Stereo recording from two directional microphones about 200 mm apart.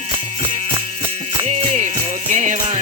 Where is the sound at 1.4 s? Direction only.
30° right (ahead or behind).